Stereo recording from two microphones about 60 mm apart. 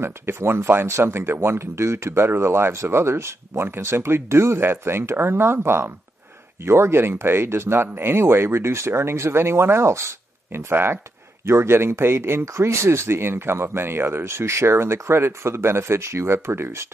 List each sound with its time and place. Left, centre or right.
0.0 s speech: right